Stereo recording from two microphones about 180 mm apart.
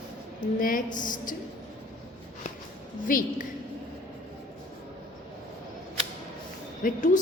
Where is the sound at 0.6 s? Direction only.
50° left (ahead or behind).